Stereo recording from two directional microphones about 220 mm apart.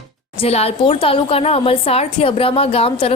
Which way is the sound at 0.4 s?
25° left (ahead or behind).